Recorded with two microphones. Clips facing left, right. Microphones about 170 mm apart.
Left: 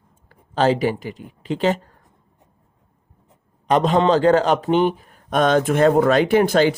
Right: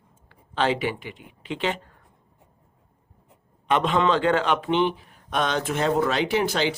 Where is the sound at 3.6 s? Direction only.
40° left (ahead or behind).